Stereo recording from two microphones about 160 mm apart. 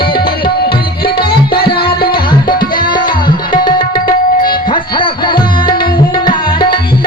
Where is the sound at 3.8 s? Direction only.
65° left (ahead or behind).